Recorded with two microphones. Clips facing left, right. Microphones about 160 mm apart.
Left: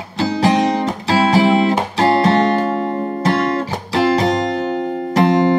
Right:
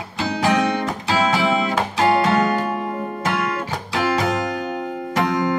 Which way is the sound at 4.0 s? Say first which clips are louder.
Left 6 dB; 30° left (ahead or behind).